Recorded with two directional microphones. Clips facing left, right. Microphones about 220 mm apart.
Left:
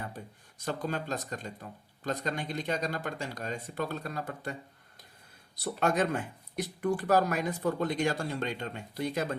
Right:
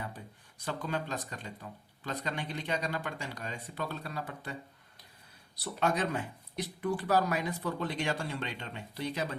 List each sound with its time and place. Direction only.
0.6 s speech: 45° left (ahead or behind)
5.6 s speech: 50° left (ahead or behind)